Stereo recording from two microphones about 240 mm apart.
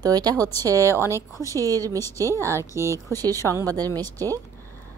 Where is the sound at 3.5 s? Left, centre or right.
Centre.